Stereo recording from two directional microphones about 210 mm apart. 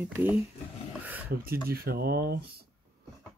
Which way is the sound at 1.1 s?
10° right (ahead or behind).